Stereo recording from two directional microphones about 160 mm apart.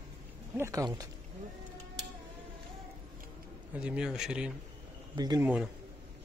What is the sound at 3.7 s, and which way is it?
Speech, 5° right (ahead or behind).